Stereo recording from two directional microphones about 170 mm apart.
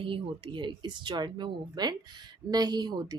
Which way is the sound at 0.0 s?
30° right (ahead or behind).